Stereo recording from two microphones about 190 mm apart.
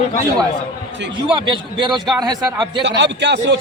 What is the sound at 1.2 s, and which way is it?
A man's voice, 25° right (ahead or behind).